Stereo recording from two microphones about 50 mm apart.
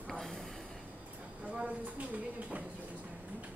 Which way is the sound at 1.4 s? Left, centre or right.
Centre.